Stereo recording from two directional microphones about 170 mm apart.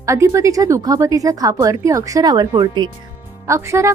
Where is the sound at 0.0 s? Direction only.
20° right (ahead or behind).